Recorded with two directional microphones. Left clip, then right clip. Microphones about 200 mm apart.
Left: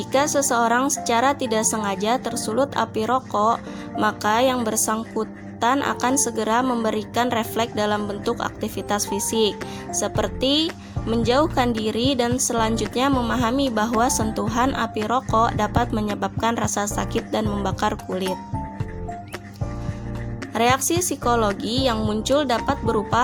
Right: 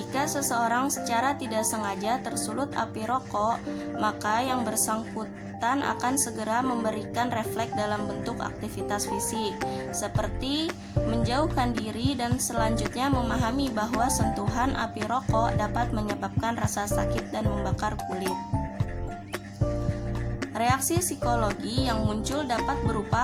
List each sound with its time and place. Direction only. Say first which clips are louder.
0.1 s a woman's voice: left 8 dB; 30° left (ahead or behind)
20.6 s a woman's voice: left 6 dB; 30° left (ahead or behind)